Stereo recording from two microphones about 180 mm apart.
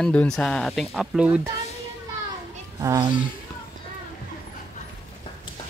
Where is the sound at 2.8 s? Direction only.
15° right (ahead or behind).